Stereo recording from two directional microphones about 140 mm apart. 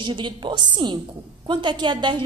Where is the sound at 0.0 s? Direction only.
35° right (ahead or behind).